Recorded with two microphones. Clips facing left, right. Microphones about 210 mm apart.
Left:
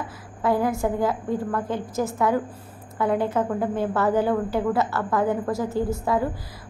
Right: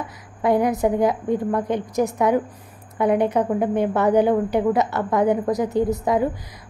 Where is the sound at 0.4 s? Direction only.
20° right (ahead or behind).